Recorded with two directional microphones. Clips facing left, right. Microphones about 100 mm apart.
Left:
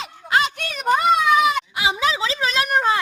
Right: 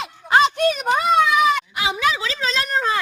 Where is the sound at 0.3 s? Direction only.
25° right (ahead or behind).